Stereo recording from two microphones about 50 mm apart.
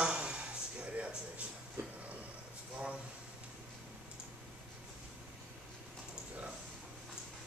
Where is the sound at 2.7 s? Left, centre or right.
Right.